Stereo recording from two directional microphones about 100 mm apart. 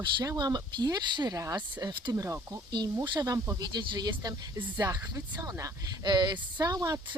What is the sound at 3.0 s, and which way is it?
Speech, 45° right (ahead or behind).